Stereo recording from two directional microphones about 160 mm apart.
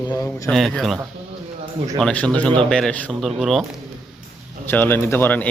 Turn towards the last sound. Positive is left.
turn(degrees=10)  # may be behind; listen again after turning